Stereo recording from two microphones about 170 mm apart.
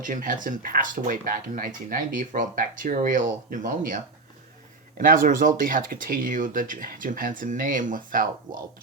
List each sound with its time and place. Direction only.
0.0 s speech: 50° right (ahead or behind)